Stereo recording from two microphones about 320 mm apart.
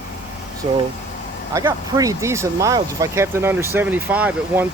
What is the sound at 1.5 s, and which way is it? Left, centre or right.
Speech, centre.